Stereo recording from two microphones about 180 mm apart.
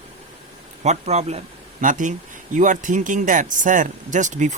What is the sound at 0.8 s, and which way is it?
Speech, 35° right (ahead or behind).